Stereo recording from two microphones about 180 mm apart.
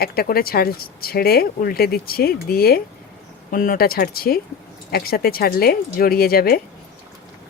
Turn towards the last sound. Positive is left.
turn(degrees=55)  # may be behind; listen again after turning